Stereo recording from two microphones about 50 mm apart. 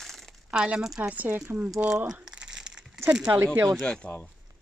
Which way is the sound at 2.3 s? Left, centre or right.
Centre.